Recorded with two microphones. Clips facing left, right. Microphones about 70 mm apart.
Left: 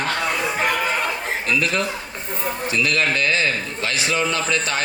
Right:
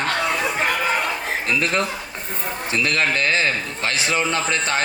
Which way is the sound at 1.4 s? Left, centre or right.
Right.